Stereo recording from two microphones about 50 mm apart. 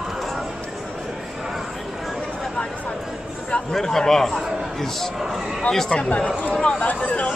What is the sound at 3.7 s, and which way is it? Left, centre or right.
A man's voice, centre.